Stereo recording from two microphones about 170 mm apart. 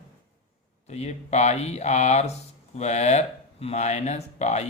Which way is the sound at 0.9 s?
40° left (ahead or behind).